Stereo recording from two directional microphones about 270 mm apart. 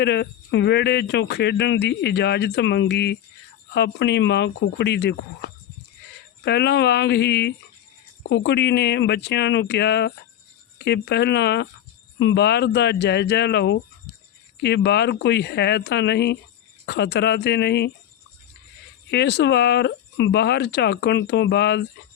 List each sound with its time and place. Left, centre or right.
0.0 s speech: left
19.1 s speech: left